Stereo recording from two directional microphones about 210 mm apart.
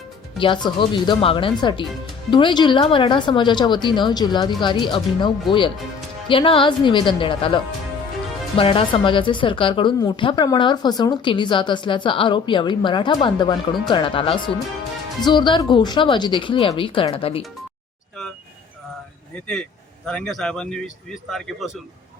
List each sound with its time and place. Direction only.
0.3 s speech: 25° left (ahead or behind)
20.1 s a man's voice: 5° left (ahead or behind)